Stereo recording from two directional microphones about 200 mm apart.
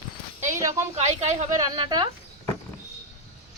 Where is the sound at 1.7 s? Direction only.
20° right (ahead or behind).